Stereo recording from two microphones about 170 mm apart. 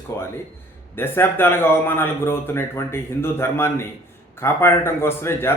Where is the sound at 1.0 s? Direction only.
15° left (ahead or behind).